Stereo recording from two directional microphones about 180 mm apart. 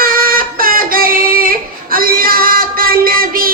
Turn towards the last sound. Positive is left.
turn(degrees=-55)  # may be behind; listen again after turning